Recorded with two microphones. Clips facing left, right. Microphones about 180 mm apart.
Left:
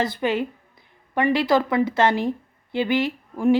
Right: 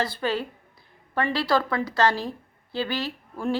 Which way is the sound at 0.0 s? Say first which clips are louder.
Left 4 dB; 20° left (ahead or behind).